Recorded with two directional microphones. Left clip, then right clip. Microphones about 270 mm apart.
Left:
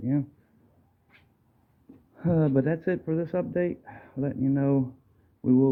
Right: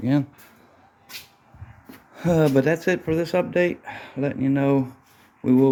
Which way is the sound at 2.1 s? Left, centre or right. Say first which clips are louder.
Right 6 dB; centre.